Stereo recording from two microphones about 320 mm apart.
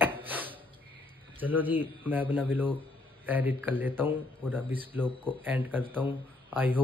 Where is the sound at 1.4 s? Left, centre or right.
Centre.